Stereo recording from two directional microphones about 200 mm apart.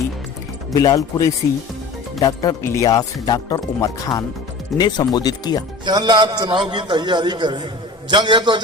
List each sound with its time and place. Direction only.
0.7 s speech: 20° left (ahead or behind)
5.8 s a man's voice: 20° right (ahead or behind)